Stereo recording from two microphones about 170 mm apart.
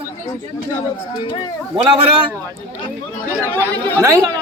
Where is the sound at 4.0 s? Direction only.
20° right (ahead or behind).